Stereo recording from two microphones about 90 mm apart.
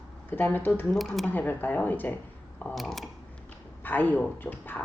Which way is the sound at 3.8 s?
20° left (ahead or behind).